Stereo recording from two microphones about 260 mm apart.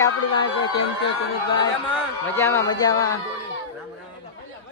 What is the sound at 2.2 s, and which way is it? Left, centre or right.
Speech, centre.